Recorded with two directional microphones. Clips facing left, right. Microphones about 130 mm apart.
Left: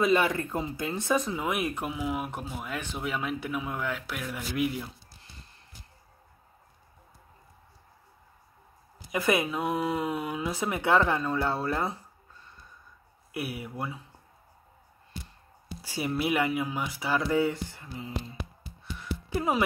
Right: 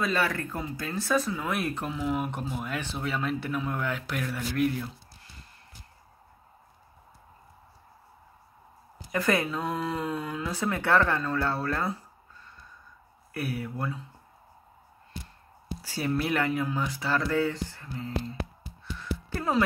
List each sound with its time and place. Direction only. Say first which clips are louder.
0.0 s speech: left 4 dB; 20° left (ahead or behind)
9.1 s speech: even; 15° left (ahead or behind)
13.3 s speech: right 2 dB; 15° left (ahead or behind)
15.8 s speech: right 1 dB; 15° left (ahead or behind)
18.9 s music: left 2 dB; 15° left (ahead or behind)